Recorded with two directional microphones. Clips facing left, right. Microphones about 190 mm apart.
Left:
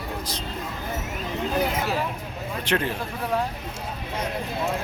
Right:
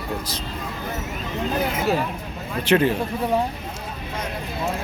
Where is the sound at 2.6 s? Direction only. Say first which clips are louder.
Right 8 dB; 5° right (ahead or behind).